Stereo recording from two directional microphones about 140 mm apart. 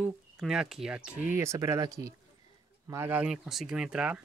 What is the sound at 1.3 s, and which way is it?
Speech, 20° right (ahead or behind).